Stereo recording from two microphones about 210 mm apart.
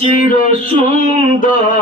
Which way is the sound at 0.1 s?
40° left (ahead or behind).